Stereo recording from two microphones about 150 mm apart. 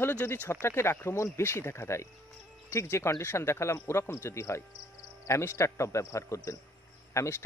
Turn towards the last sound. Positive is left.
turn(degrees=20)  # may be behind; listen again after turning